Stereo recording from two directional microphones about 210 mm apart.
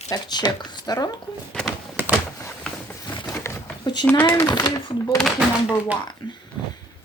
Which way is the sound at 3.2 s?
10° left (ahead or behind).